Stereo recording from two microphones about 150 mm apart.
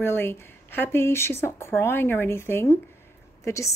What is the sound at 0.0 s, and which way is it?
Speech, 15° left (ahead or behind).